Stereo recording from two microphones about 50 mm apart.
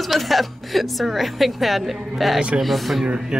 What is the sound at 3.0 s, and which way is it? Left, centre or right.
Speech, centre.